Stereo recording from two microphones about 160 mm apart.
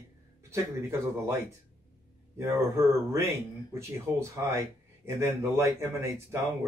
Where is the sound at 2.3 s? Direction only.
15° right (ahead or behind).